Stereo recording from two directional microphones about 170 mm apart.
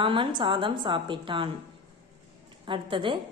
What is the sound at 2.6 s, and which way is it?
Speech, 30° right (ahead or behind).